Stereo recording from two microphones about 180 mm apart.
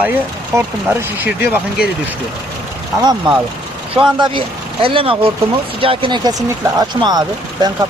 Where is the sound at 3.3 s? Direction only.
25° right (ahead or behind).